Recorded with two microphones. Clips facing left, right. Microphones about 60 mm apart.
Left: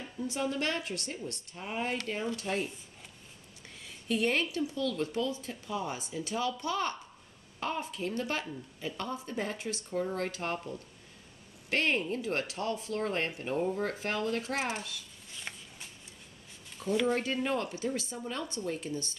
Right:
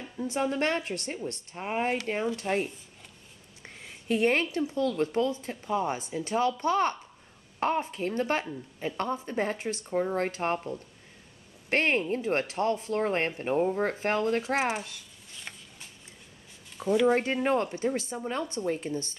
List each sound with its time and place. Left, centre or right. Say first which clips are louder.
0.2 s speech: right 5 dB; right
15.3 s a sound: left 1 dB; centre
16.7 s speech: right 6 dB; centre
17.1 s speech: right 5 dB; right